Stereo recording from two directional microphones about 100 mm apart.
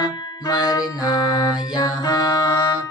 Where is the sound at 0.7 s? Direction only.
40° left (ahead or behind).